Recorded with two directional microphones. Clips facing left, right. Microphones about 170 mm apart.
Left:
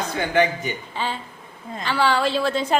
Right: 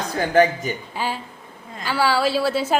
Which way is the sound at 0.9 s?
10° right (ahead or behind).